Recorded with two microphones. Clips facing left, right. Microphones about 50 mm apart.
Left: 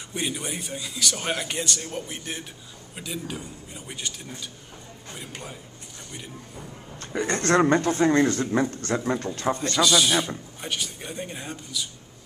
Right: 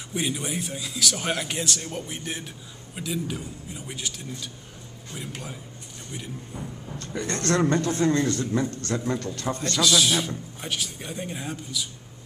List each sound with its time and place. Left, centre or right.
0.1 s a man's voice: centre
7.0 s a man's voice: left
9.6 s a man's voice: centre